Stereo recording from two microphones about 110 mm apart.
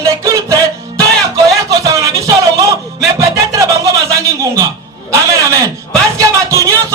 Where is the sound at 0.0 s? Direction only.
30° right (ahead or behind).